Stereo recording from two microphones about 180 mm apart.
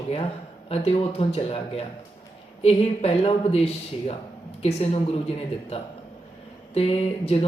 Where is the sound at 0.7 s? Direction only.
35° left (ahead or behind).